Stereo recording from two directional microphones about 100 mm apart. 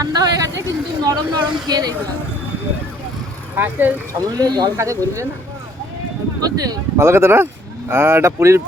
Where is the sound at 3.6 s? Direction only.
20° right (ahead or behind).